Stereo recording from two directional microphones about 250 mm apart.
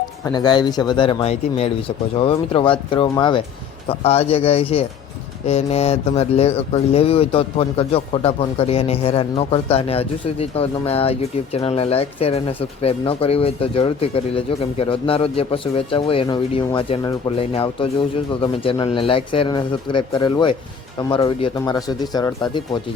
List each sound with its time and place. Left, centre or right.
0.3 s speech: centre